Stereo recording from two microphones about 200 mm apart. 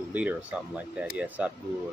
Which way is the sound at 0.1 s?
10° right (ahead or behind).